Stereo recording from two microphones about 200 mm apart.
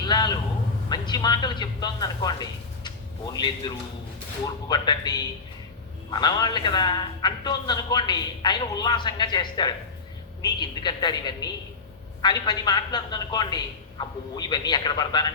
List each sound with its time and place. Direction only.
0.1 s a man's voice: 20° left (ahead or behind)
4.7 s a man's voice: 20° left (ahead or behind)